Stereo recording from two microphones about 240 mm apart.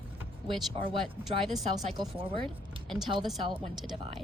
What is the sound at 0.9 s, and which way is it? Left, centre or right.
Speech, centre.